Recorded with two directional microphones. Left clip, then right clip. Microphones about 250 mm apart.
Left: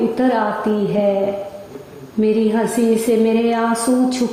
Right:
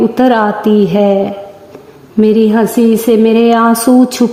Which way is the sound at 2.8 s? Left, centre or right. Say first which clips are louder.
Right 6 dB; right.